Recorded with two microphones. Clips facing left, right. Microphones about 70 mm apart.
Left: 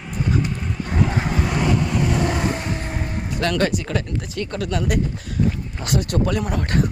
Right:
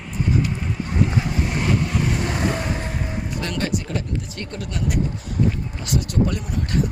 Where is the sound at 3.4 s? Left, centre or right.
Left.